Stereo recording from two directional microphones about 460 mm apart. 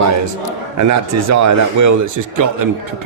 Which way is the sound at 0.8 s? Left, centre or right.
Right.